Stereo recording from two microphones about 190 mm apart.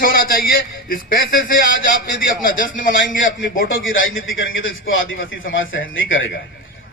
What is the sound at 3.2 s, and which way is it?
A man's voice, 90° left.